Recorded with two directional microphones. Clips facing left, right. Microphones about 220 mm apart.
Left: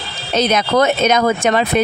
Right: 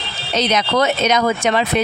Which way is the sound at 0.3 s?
50° left (ahead or behind).